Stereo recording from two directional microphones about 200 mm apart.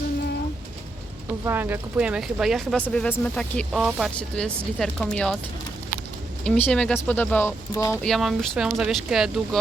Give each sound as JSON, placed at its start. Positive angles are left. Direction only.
{"t": 1.5, "sound": "speech", "side_deg": -10}
{"t": 6.4, "sound": "speech", "side_deg": 5}
{"t": 8.0, "sound": "speech", "side_deg": 0}